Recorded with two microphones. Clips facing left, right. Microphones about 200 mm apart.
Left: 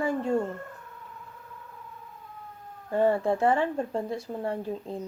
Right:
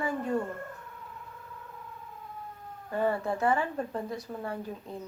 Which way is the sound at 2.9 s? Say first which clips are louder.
Left 5 dB; 25° left (ahead or behind).